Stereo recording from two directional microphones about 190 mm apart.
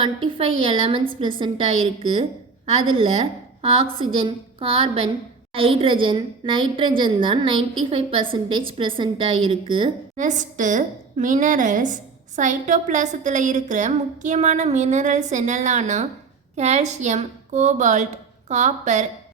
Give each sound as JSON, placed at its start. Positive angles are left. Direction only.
{"t": 0.3, "sound": "a woman's voice", "side_deg": -30}
{"t": 10.2, "sound": "a woman's voice", "side_deg": -40}